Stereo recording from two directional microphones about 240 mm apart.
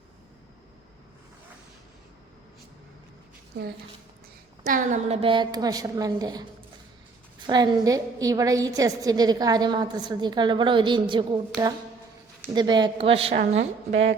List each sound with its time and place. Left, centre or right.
3.5 s a woman's voice: right
4.6 s a woman's voice: right; by 6.4 s centre
7.4 s a woman's voice: centre